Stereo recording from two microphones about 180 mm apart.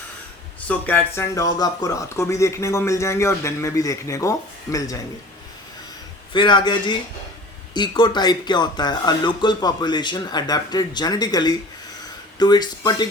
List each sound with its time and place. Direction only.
0.7 s speech: 10° left (ahead or behind)
6.3 s speech: 25° left (ahead or behind)